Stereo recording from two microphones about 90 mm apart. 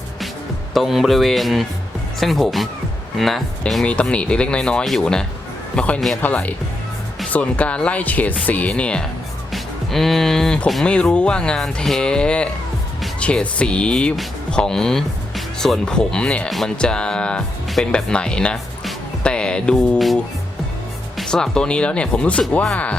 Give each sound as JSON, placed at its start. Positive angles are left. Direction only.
{"t": 0.7, "sound": "speech", "side_deg": 0}
{"t": 3.8, "sound": "a man's voice", "side_deg": 15}
{"t": 9.5, "sound": "music", "side_deg": 0}
{"t": 10.8, "sound": "speech", "side_deg": 10}
{"t": 21.2, "sound": "speech", "side_deg": 5}